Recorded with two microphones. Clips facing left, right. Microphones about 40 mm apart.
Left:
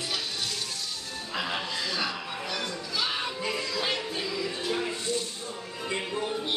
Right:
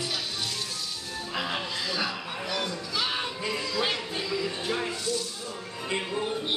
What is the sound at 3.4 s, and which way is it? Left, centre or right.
Music, centre.